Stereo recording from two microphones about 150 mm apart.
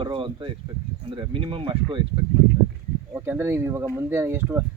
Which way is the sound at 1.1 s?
35° right (ahead or behind).